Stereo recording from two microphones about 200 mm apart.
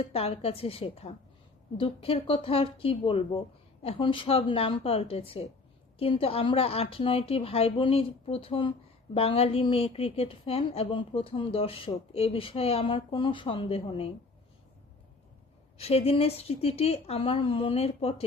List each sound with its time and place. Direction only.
0.0 s a woman's voice: 30° left (ahead or behind)
15.8 s a woman's voice: 30° left (ahead or behind)